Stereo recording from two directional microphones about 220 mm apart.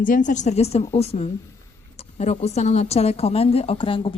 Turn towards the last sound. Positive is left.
turn(degrees=25)  # may be behind; listen again after turning